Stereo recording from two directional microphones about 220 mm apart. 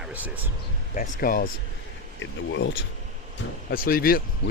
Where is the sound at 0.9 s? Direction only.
40° left (ahead or behind).